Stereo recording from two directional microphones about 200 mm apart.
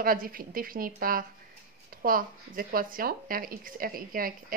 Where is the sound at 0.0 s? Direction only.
45° right (ahead or behind).